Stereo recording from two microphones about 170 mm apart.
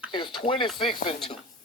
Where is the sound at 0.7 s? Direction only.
30° left (ahead or behind).